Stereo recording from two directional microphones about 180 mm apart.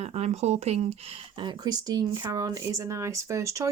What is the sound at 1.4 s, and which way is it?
Speech, 20° right (ahead or behind).